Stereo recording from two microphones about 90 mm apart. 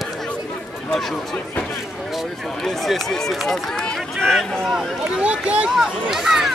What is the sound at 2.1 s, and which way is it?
Run, centre (ahead or behind).